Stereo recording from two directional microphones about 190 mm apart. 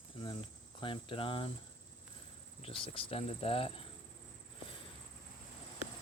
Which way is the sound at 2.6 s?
30° left (ahead or behind).